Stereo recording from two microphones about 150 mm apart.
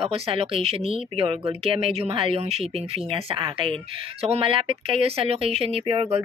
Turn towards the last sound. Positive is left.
turn(degrees=-35)  # may be behind; listen again after turning